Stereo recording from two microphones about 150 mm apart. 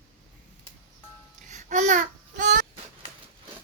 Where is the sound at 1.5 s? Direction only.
50° right (ahead or behind).